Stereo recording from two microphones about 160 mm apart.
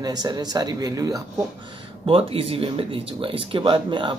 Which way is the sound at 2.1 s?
35° right (ahead or behind).